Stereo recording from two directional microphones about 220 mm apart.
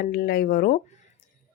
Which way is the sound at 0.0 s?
45° left (ahead or behind).